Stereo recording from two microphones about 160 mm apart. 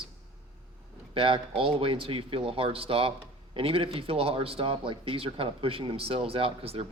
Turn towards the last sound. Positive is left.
turn(degrees=-35)  # may be behind; listen again after turning